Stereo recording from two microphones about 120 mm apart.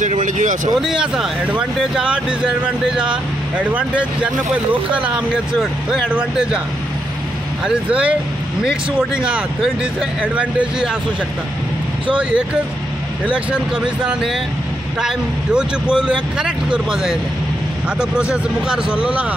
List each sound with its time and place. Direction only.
0.0 s vehicle: 90° right
0.7 s speech: 5° right (ahead or behind)
7.6 s speech: 10° right (ahead or behind)
13.3 s speech: 10° right (ahead or behind)
18.3 s speech: 5° right (ahead or behind)